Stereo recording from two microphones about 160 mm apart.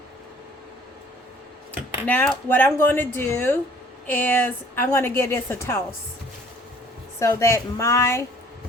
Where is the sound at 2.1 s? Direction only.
10° left (ahead or behind).